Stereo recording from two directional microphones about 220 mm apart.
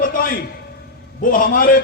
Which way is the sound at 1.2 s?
40° left (ahead or behind).